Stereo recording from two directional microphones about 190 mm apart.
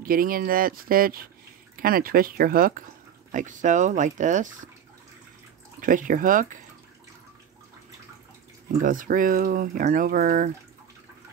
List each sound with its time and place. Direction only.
0.0 s speech: 50° right (ahead or behind)
5.8 s speech: 45° right (ahead or behind)
8.8 s speech: 45° right (ahead or behind)